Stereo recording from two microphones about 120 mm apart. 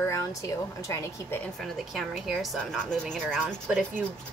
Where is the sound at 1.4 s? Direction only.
Centre (ahead or behind).